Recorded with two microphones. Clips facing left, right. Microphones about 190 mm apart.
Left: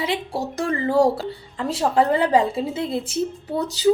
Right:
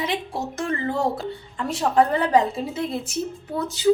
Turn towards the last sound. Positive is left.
turn(degrees=35)  # may be behind; listen again after turning